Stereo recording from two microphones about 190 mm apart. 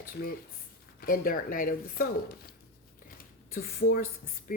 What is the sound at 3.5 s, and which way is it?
A woman's voice, 50° left (ahead or behind).